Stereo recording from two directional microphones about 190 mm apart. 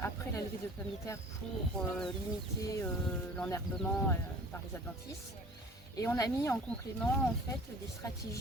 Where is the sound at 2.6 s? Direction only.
15° left (ahead or behind).